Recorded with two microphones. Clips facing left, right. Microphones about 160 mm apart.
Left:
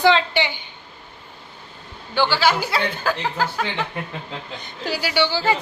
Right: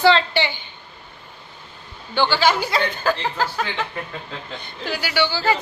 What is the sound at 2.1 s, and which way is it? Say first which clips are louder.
Speech: right 1 dB; 10° left (ahead or behind).